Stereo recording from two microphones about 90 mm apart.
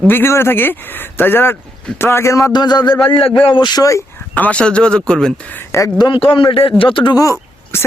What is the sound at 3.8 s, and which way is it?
Speech, 35° left (ahead or behind).